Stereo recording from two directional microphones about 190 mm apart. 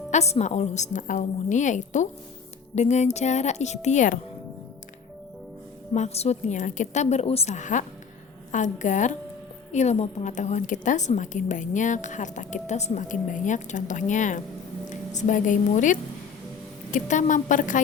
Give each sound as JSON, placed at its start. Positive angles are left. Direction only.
{"t": 0.1, "sound": "a woman's voice", "side_deg": 35}
{"t": 5.9, "sound": "a woman's voice", "side_deg": 35}